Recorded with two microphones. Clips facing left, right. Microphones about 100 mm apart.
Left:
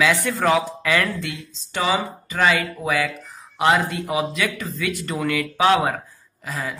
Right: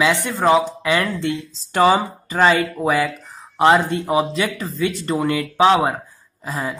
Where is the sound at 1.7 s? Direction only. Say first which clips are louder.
Right 7 dB; 45° right (ahead or behind).